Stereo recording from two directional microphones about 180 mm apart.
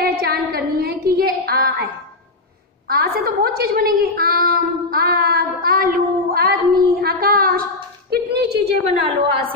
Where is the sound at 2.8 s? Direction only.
55° right (ahead or behind).